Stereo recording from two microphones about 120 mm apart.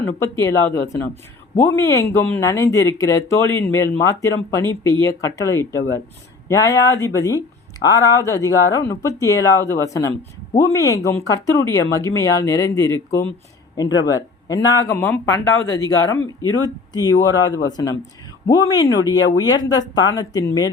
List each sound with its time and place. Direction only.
0.2 s speech: 25° left (ahead or behind)
14.9 s speech: 15° left (ahead or behind)
15.7 s speech: 30° left (ahead or behind)